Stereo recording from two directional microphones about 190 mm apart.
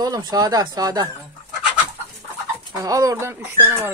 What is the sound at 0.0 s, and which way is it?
Speech, 20° right (ahead or behind).